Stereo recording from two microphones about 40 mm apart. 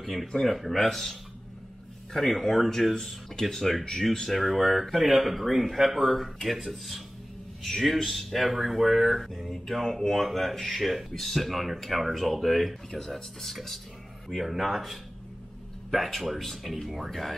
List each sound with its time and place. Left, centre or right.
0.0 s speech: centre
2.1 s speech: centre
8.1 s speech: centre